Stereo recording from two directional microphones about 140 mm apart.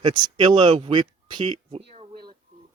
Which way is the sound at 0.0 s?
35° right (ahead or behind).